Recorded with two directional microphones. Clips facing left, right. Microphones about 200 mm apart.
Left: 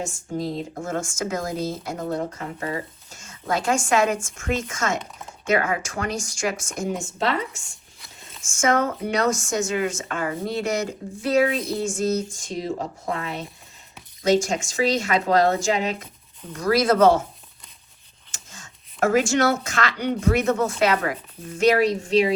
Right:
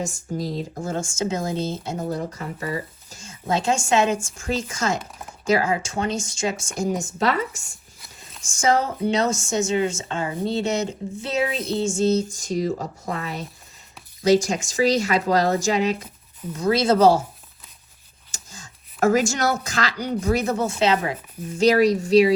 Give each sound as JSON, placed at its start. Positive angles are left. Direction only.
{"t": 0.3, "sound": "speech", "side_deg": -40}
{"t": 6.9, "sound": "speech", "side_deg": -40}
{"t": 12.3, "sound": "speech", "side_deg": -40}
{"t": 14.3, "sound": "speech", "side_deg": -35}
{"t": 16.5, "sound": "speech", "side_deg": -25}
{"t": 18.3, "sound": "a sound", "side_deg": -35}
{"t": 20.2, "sound": "speech", "side_deg": -35}
{"t": 21.6, "sound": "speech", "side_deg": -40}